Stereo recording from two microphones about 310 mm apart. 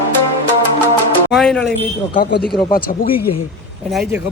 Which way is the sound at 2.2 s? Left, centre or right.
Left.